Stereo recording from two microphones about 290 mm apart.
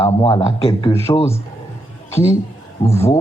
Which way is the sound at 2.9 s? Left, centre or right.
Centre.